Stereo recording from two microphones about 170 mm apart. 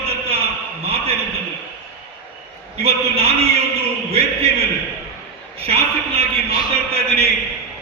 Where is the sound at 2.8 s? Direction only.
35° right (ahead or behind).